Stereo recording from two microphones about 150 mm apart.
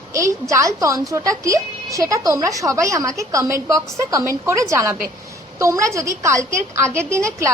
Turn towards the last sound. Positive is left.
turn(degrees=-20)  # may be behind; listen again after turning